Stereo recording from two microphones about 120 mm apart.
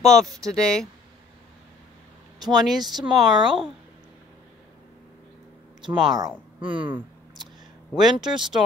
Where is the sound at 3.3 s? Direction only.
40° right (ahead or behind).